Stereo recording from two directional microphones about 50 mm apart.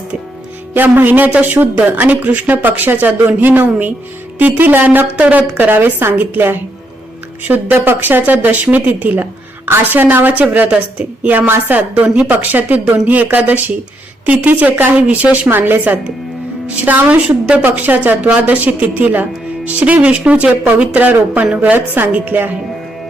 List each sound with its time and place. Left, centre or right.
0.7 s speech: right
5.5 s a woman's voice: right
10.4 s a woman's voice: right
15.4 s speech: right
20.9 s speech: right